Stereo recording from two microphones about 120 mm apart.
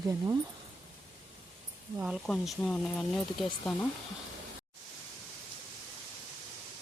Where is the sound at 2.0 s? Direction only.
5° right (ahead or behind).